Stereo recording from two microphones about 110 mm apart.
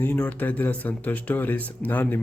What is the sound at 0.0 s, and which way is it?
Speech, 15° left (ahead or behind).